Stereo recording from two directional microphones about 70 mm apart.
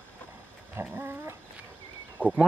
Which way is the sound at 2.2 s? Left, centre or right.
Right.